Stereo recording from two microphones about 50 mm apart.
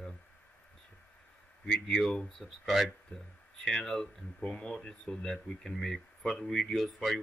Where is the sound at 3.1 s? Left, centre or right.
Left.